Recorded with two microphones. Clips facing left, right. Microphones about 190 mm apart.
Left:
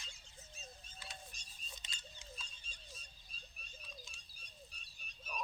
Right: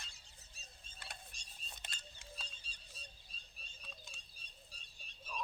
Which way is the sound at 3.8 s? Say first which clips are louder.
Even; 60° right (ahead or behind).